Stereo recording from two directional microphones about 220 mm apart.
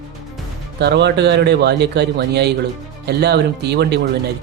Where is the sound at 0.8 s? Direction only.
50° right (ahead or behind).